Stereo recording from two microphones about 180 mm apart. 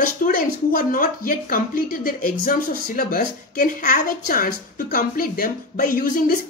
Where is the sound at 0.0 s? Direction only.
50° left (ahead or behind).